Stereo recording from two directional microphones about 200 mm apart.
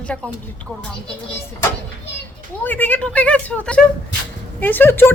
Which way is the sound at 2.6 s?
10° left (ahead or behind).